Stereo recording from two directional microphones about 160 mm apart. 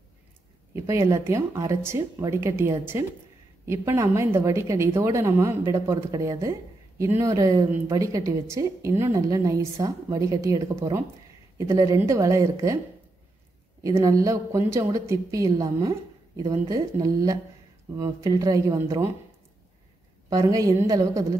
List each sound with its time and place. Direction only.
0.8 s a woman's voice: 20° right (ahead or behind)
13.8 s a woman's voice: 20° right (ahead or behind)
20.2 s a woman's voice: 20° right (ahead or behind)